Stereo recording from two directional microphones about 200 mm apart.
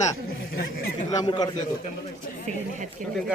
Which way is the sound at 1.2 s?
25° left (ahead or behind).